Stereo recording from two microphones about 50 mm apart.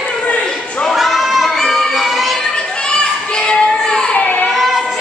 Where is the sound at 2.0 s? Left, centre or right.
Centre.